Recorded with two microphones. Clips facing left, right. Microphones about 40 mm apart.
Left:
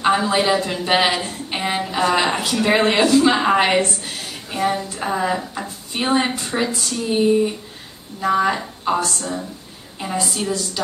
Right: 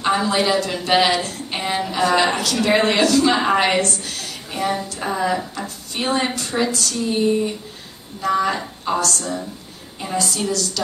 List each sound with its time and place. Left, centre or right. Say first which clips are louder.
0.0 s a woman's voice: left 1 dB; centre
3.3 s a woman's voice: left 1 dB; centre
7.0 s a woman's voice: left 3 dB; centre
8.5 s a woman's voice: left 1 dB; centre
10.1 s a woman's voice: right 1 dB; left